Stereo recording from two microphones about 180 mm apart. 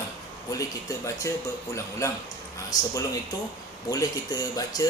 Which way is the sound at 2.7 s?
20° left (ahead or behind).